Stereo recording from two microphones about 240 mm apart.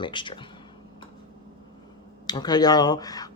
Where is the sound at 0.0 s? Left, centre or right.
Centre.